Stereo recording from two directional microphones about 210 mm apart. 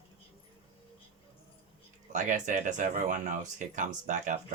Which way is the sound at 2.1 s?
35° right (ahead or behind).